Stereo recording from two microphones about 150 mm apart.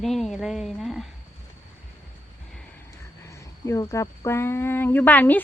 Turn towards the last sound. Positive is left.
turn(degrees=10)  # may be behind; listen again after turning